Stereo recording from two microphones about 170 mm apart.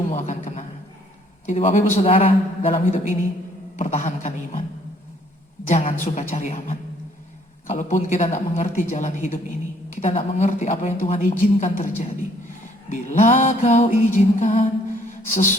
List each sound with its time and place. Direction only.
0.1 s a sound: 45° left (ahead or behind)
1.5 s a woman's voice: 45° left (ahead or behind)
2.7 s a woman's voice: 45° left (ahead or behind)
5.6 s a woman's voice: 40° left (ahead or behind)